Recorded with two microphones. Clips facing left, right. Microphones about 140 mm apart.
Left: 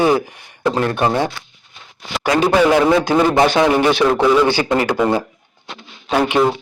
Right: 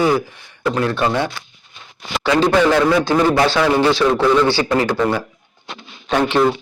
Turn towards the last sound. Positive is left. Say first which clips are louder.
# even
turn(degrees=5)  # may be behind; listen again after turning